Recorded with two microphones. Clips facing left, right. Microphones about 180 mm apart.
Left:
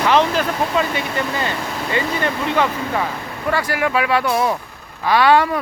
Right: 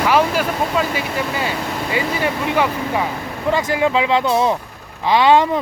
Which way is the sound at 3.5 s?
20° right (ahead or behind).